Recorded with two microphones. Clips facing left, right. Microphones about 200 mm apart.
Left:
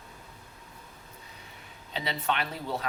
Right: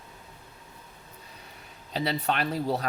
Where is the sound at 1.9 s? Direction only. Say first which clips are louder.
Right 3 dB; 40° right (ahead or behind).